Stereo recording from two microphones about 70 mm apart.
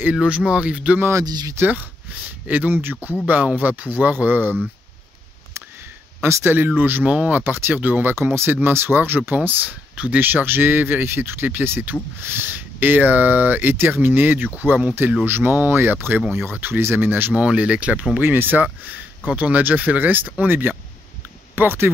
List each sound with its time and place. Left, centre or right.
0.1 s speech: centre
1.2 s speech: right
1.6 s speech: right
6.2 s speech: right
15.2 s speech: right
18.2 s speech: right